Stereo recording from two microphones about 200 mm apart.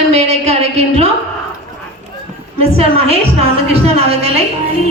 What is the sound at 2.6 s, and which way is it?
A woman's voice, 30° right (ahead or behind).